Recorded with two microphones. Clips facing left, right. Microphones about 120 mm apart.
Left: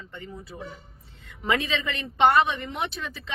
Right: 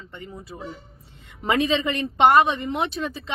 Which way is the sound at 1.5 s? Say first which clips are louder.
Right 5 dB; 20° right (ahead or behind).